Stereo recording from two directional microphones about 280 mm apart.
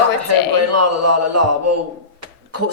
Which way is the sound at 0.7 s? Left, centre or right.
Right.